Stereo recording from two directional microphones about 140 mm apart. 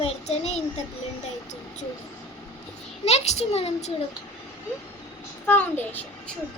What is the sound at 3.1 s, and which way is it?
Speech, 50° left (ahead or behind).